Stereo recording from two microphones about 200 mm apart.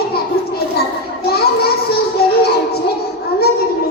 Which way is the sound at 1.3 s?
50° left (ahead or behind).